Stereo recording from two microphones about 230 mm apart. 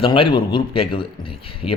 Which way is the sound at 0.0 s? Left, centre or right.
Left.